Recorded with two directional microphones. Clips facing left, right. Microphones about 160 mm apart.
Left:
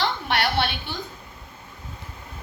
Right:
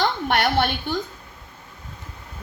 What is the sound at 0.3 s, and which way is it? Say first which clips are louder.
Speech: right 3 dB; 50° right (ahead or behind).